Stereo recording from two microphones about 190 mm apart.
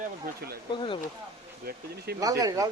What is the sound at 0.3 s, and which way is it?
Speech, 50° right (ahead or behind).